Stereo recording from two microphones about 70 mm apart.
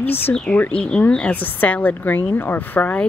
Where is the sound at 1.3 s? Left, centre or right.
Left.